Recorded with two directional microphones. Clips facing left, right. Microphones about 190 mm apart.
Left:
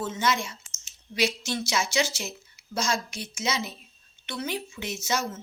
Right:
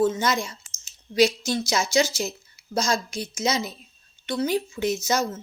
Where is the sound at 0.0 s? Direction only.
40° right (ahead or behind).